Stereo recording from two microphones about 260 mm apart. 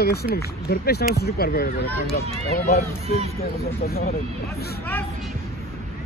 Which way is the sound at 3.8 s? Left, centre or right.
Left.